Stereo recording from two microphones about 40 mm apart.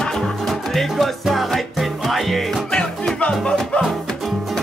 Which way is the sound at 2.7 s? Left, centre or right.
Centre.